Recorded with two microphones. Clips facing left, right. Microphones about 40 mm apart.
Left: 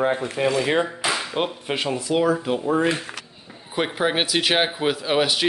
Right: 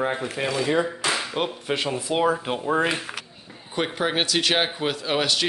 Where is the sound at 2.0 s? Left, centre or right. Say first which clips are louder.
Left 3 dB; right.